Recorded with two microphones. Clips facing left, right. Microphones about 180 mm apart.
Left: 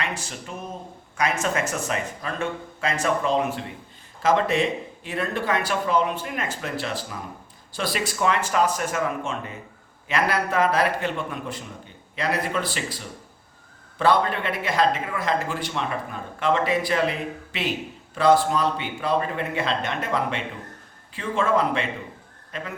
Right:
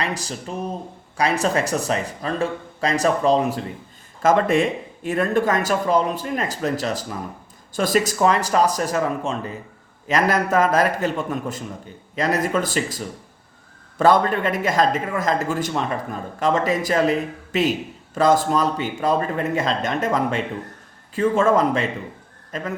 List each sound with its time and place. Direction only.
0.0 s speech: 35° right (ahead or behind)
4.2 s a man's voice: 50° right (ahead or behind)
14.0 s a man's voice: 45° right (ahead or behind)